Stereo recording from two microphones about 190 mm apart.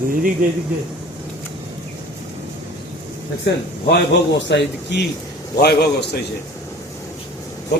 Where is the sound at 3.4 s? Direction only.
60° left (ahead or behind).